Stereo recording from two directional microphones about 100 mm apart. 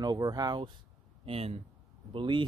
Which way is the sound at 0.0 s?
40° right (ahead or behind).